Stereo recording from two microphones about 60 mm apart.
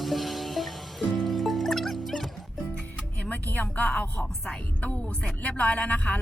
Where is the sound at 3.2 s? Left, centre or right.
Left.